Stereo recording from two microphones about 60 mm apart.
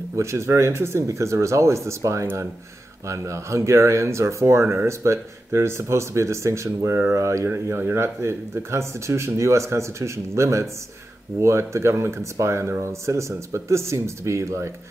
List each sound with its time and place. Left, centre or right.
0.1 s speech: right